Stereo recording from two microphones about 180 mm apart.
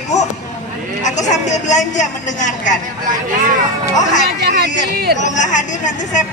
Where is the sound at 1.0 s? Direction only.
40° left (ahead or behind).